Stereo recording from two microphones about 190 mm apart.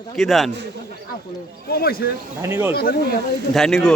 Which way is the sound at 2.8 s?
55° left (ahead or behind).